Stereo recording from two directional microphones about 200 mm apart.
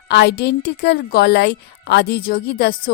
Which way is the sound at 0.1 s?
55° left (ahead or behind).